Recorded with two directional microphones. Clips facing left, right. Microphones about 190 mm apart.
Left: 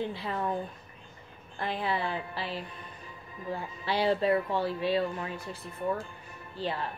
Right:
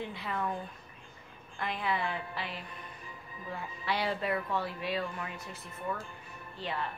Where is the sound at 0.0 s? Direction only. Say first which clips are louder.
Left 4 dB; 30° left (ahead or behind).